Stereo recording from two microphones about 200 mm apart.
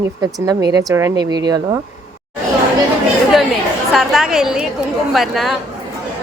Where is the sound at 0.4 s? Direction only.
20° right (ahead or behind).